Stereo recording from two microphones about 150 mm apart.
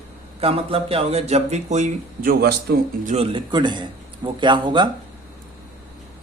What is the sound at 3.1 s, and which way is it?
Speech, 35° right (ahead or behind).